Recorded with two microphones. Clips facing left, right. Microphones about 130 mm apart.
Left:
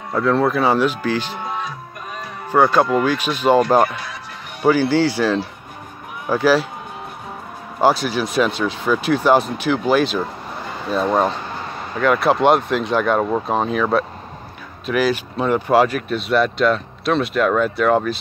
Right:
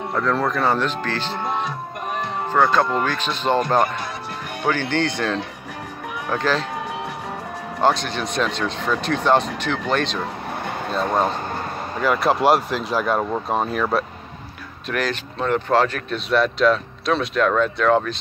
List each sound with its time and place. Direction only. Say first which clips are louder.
0.1 s speech: left 5 dB; 5° left (ahead or behind)
2.1 s music: right 7 dB; 70° right (ahead or behind)
2.5 s speech: left 4 dB; 10° left (ahead or behind)
7.8 s speech: left 3 dB; 5° left (ahead or behind)
12.0 s speech: left 3 dB; centre (ahead or behind)